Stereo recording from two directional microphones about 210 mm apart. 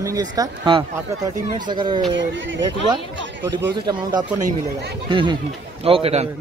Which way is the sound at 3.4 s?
15° right (ahead or behind).